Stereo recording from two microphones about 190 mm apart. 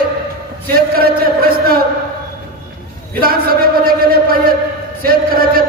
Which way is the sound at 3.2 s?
50° right (ahead or behind).